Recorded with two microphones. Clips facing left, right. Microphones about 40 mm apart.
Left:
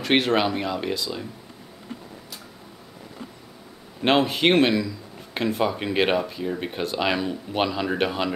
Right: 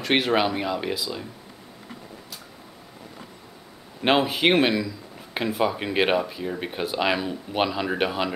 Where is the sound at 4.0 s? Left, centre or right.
Centre.